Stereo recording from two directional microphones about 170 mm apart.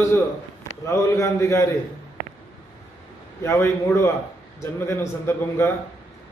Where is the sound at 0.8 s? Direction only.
15° left (ahead or behind).